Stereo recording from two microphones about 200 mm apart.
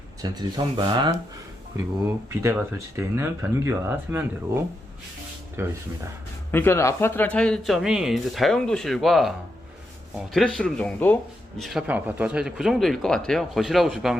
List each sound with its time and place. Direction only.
0.2 s speech: 20° right (ahead or behind)
2.0 s speech: 15° right (ahead or behind)
6.5 s speech: 10° left (ahead or behind)